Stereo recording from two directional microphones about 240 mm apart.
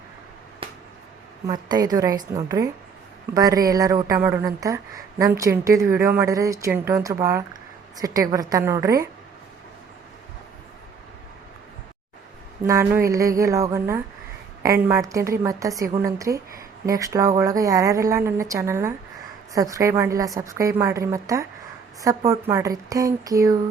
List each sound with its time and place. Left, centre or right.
0.6 s a sound: right
1.5 s speech: centre
12.6 s speech: centre